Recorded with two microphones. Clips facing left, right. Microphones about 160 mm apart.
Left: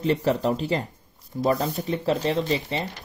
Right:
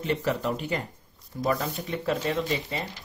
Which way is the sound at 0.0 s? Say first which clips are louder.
Left 5 dB; 35° left (ahead or behind).